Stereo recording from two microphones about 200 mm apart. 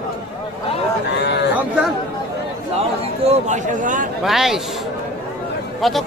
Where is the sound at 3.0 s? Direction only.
30° right (ahead or behind).